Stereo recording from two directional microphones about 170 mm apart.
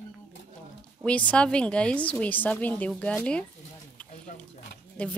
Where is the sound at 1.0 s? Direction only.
10° left (ahead or behind).